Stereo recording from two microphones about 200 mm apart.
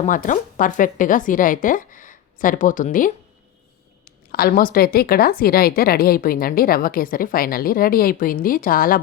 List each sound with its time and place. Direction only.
0.0 s a woman's voice: 40° left (ahead or behind)